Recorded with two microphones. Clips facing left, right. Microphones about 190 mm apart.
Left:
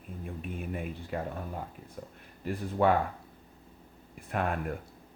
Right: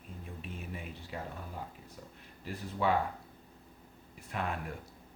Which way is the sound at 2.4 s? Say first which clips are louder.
Left 6 dB; 55° left (ahead or behind).